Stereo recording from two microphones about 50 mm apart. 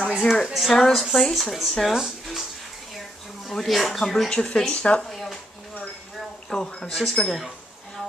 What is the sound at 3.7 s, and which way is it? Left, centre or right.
Speech, centre.